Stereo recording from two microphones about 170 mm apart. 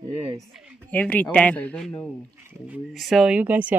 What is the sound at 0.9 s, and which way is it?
Speech, 10° left (ahead or behind).